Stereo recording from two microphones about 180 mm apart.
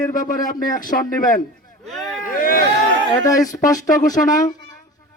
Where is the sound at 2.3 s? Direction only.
50° left (ahead or behind).